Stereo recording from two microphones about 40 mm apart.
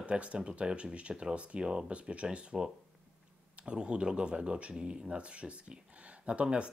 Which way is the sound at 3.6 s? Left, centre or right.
Right.